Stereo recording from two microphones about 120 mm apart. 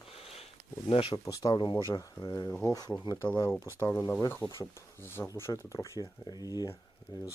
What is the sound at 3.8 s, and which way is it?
Speech, 25° left (ahead or behind).